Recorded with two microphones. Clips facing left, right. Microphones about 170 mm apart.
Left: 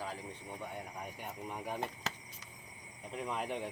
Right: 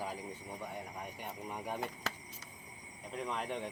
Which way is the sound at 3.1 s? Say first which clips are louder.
Even; 5° left (ahead or behind).